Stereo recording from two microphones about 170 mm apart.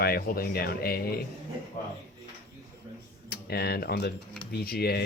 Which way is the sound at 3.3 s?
70° left (ahead or behind).